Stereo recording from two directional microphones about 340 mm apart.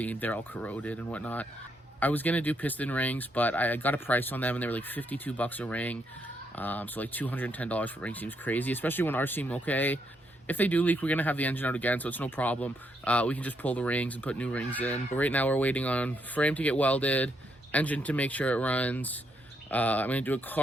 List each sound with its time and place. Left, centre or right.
0.0 s speech: centre